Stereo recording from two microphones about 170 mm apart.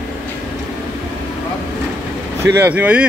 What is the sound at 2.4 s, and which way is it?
Speech, 15° right (ahead or behind).